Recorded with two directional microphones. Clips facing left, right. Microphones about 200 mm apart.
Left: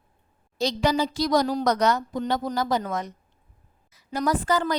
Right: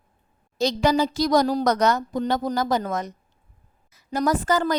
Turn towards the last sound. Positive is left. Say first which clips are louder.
# right 2 dB
turn(degrees=-45)  # may be behind; listen again after turning